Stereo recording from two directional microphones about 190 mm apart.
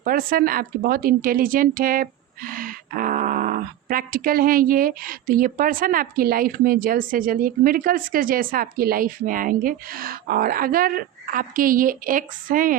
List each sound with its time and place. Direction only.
0.0 s a woman's voice: 50° right (ahead or behind)